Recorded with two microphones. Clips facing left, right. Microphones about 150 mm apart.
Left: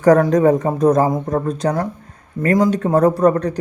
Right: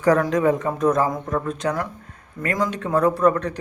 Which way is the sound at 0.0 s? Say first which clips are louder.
Left 6 dB; 40° left (ahead or behind).